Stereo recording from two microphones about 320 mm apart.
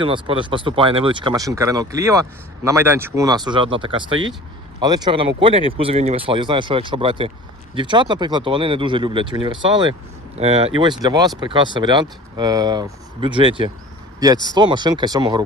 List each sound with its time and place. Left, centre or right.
0.0 s speech: centre